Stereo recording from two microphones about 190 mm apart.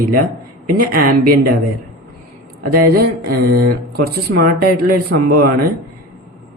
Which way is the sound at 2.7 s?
50° right (ahead or behind).